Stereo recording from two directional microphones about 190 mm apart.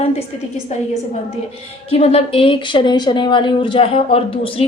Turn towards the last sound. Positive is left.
turn(degrees=30)  # may be behind; listen again after turning